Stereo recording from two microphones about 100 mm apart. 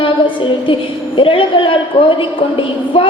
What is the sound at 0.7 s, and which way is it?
A woman's voice, 60° left (ahead or behind).